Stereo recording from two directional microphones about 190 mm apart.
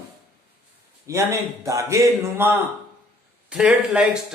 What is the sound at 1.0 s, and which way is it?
A man's voice, 15° right (ahead or behind).